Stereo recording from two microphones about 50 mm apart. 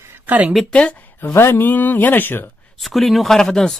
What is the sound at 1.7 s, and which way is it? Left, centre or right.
Speech, left.